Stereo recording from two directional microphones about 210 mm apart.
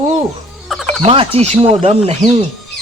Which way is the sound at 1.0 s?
25° right (ahead or behind).